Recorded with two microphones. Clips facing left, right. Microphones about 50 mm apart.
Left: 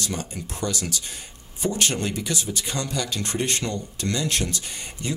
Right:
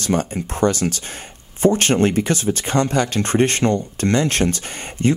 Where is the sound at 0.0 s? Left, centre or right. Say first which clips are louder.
Right 10 dB; right.